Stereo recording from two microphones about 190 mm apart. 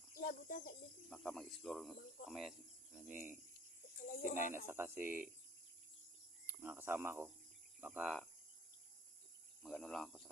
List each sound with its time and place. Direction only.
0.1 s a child's voice: 45° left (ahead or behind)
1.1 s speech: 5° left (ahead or behind)
4.0 s speech: 40° left (ahead or behind)
4.5 s speech: 15° right (ahead or behind)
6.6 s speech: 10° right (ahead or behind)
7.8 s cricket: 10° right (ahead or behind)
9.6 s speech: 5° left (ahead or behind)